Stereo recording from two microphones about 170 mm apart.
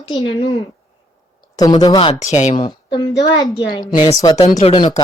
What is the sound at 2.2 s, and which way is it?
A woman's voice, 45° left (ahead or behind).